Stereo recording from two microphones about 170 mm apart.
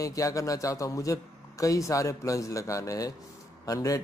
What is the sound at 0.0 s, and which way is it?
Speech, 20° left (ahead or behind).